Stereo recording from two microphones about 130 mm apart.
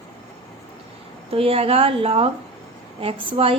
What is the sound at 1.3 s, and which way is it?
A woman's voice, 50° right (ahead or behind).